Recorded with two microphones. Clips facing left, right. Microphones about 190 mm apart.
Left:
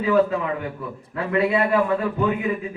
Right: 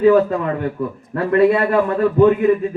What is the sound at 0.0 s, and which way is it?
A man's voice, 50° right (ahead or behind).